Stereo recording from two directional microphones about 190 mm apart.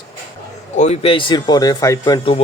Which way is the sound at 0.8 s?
35° left (ahead or behind).